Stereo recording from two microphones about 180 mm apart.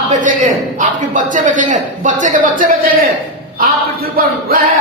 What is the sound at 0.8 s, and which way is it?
A man's voice, 45° right (ahead or behind).